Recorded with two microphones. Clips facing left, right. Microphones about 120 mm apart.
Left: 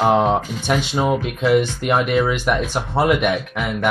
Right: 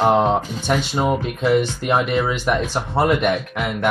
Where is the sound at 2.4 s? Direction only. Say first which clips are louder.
Even; 15° right (ahead or behind).